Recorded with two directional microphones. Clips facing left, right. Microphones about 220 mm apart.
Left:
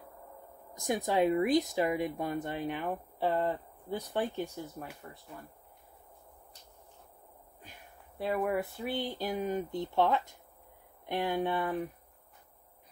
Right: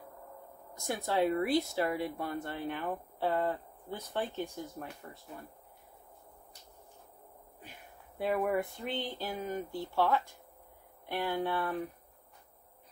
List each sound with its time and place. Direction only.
0.7 s speech: 15° left (ahead or behind)
4.7 s speech: centre (ahead or behind)
8.2 s speech: centre (ahead or behind); by 11.7 s 20° left (ahead or behind)